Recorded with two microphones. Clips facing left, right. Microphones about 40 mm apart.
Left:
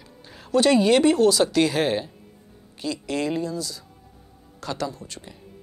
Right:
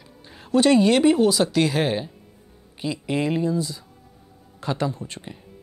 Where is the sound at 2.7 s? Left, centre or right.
Right.